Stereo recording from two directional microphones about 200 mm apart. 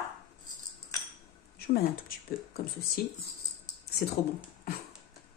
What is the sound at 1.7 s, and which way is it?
Speech, 50° left (ahead or behind).